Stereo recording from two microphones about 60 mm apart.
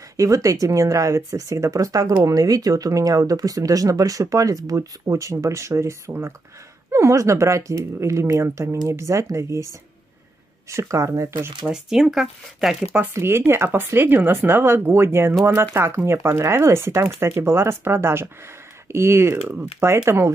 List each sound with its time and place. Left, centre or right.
0.2 s speech: right
11.6 s speech: centre
13.1 s speech: right